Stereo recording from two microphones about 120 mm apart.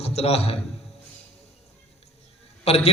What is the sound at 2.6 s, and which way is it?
Speech, 55° left (ahead or behind).